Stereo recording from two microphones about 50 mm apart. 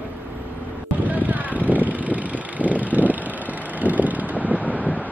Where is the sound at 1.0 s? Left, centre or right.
Right.